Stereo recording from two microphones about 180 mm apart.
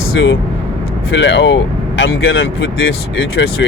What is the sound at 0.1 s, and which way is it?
Speech, 90° left.